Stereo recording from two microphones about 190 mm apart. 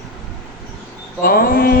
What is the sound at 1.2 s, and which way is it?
Mantra, 50° left (ahead or behind).